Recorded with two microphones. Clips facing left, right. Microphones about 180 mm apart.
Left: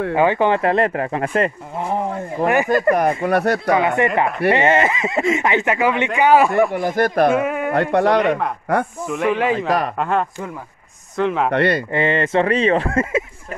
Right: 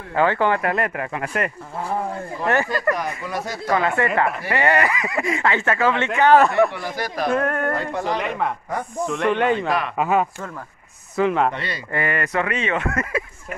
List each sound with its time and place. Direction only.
0.1 s speech: 15° left (ahead or behind)
2.4 s speech: 15° left (ahead or behind)
3.3 s speech: 65° left (ahead or behind)
3.7 s speech: 15° left (ahead or behind)
6.7 s speech: 50° left (ahead or behind)
7.3 s speech: 5° left (ahead or behind)
7.7 s speech: 70° left (ahead or behind)
9.0 s speech: 5° left (ahead or behind)
9.7 s speech: 40° left (ahead or behind)
9.9 s speech: 5° right (ahead or behind)
11.5 s speech: 60° left (ahead or behind)
11.9 s speech: 25° left (ahead or behind)